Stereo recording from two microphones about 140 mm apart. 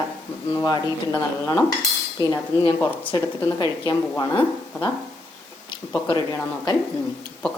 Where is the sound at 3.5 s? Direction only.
30° left (ahead or behind).